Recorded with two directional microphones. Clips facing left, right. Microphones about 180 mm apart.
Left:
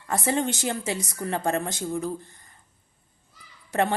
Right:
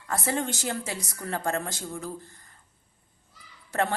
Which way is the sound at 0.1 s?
20° left (ahead or behind).